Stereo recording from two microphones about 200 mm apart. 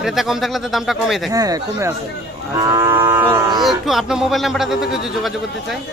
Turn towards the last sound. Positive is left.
turn(degrees=0)  # may be behind; listen again after turning